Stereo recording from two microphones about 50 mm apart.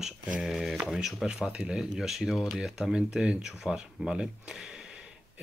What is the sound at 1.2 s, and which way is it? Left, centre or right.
Speech, centre.